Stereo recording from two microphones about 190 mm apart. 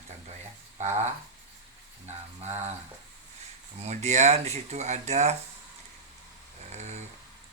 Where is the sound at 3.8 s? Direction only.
35° right (ahead or behind).